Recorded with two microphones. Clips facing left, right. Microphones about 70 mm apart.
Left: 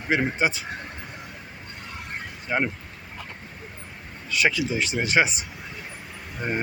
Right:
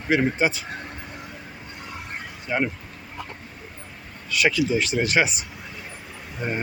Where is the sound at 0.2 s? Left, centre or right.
Centre.